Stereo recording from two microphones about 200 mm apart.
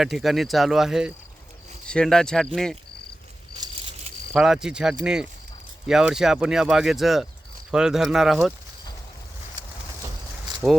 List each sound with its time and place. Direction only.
0.0 s speech: centre (ahead or behind)
3.6 s cricket: 25° right (ahead or behind)
4.3 s speech: centre (ahead or behind)